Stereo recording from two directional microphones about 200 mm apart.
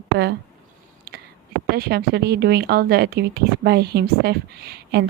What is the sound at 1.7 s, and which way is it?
Speech, 50° right (ahead or behind).